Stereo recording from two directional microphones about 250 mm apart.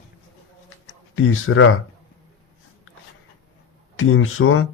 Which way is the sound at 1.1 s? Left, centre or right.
Left.